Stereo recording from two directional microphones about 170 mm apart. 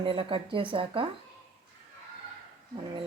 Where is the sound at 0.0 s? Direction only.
30° right (ahead or behind).